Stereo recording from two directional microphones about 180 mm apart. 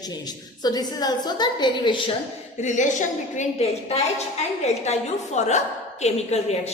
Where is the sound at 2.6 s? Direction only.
40° left (ahead or behind).